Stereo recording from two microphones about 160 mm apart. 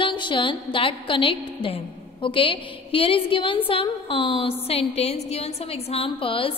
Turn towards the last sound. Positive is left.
turn(degrees=35)  # may be behind; listen again after turning